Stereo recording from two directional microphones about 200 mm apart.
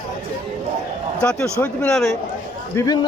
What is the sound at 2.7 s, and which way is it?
Speech, 20° left (ahead or behind).